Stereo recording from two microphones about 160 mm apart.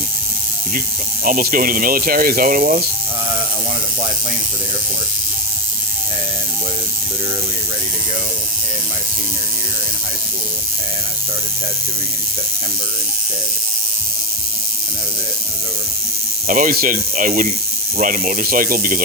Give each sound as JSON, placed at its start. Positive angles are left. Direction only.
{"t": 1.2, "sound": "speech", "side_deg": -65}
{"t": 16.5, "sound": "speech", "side_deg": -60}